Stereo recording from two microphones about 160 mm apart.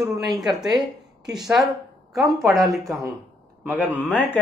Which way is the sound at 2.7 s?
Centre (ahead or behind).